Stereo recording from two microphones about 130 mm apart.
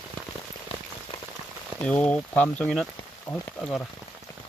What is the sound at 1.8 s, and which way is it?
Speech, 10° left (ahead or behind).